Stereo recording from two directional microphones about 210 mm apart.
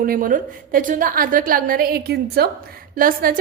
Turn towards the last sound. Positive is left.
turn(degrees=-40)  # may be behind; listen again after turning